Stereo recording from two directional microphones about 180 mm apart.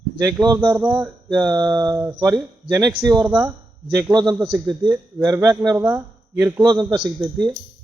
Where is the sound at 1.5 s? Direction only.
20° right (ahead or behind).